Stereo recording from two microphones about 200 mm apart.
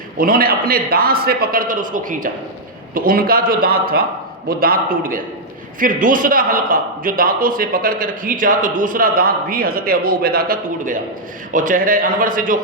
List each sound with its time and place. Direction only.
0.2 s a man's voice: 45° right (ahead or behind)